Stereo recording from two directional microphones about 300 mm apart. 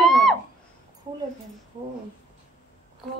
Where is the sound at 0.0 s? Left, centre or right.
Centre.